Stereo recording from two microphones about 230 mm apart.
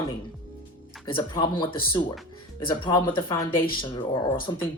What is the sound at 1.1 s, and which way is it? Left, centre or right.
Speech, left.